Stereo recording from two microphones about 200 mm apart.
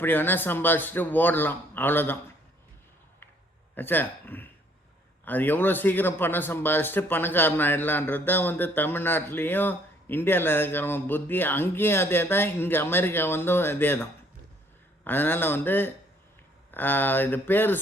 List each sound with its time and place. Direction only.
0.0 s a man's voice: 10° left (ahead or behind)
3.8 s a man's voice: 10° left (ahead or behind)